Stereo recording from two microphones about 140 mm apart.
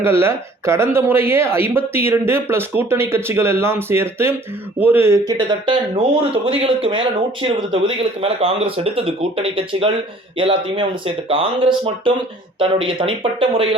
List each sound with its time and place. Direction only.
0.0 s speech: 15° right (ahead or behind)
5.3 s speech: 30° right (ahead or behind)